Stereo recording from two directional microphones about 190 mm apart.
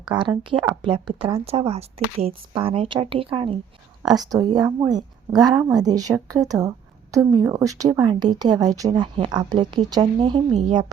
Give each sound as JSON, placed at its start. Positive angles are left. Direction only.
{"t": 0.2, "sound": "a woman's voice", "side_deg": -25}